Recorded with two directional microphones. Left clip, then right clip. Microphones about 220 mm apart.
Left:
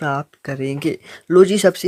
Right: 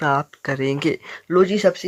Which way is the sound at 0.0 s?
15° left (ahead or behind).